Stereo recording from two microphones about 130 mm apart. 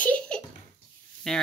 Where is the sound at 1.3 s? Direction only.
5° left (ahead or behind).